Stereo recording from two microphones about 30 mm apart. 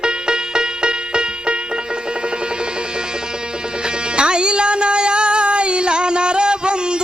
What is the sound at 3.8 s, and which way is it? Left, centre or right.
Music, right.